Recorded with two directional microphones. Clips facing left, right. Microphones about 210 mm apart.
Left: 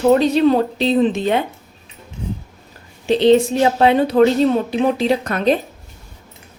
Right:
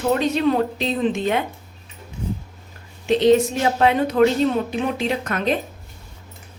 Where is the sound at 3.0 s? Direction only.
30° left (ahead or behind).